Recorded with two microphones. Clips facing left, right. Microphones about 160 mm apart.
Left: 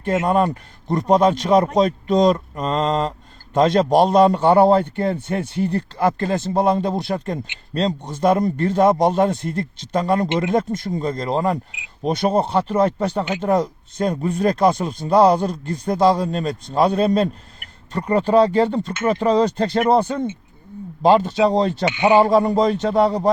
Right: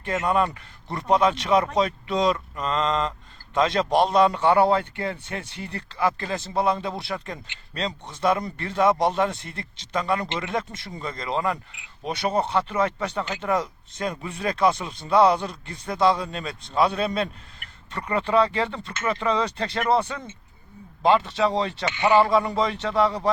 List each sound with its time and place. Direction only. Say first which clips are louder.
0.0 s speech: left 5 dB; 40° left (ahead or behind)
21.8 s a man's voice: left 4 dB; 20° left (ahead or behind)
22.2 s speech: left 6 dB; 40° left (ahead or behind)